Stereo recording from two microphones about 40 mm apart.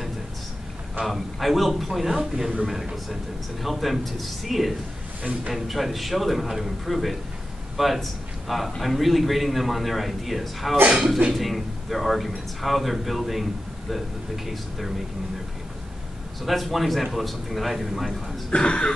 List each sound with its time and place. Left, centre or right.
1.0 s a man's voice: centre
16.4 s a man's voice: centre
18.5 s throat clearing: left